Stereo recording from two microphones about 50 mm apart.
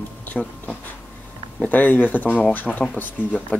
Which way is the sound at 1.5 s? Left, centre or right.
Left.